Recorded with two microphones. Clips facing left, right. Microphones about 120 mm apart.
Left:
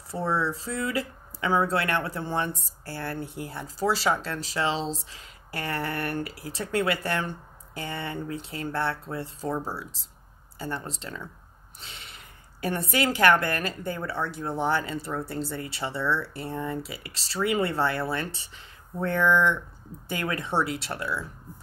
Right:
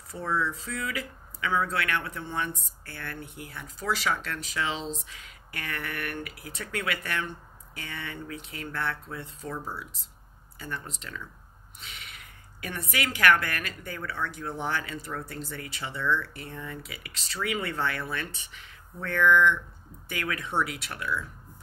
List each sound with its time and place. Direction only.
0.1 s speech: 30° left (ahead or behind)